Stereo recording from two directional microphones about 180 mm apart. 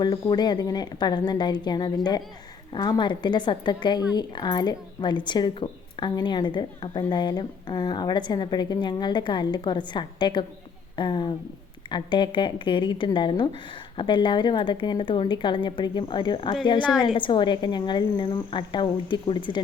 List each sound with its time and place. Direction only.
0.0 s speech: 25° left (ahead or behind)